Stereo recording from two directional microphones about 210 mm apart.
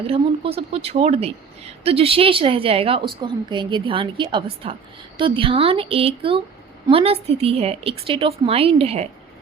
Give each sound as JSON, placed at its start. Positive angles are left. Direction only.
{"t": 0.1, "sound": "speech", "side_deg": -30}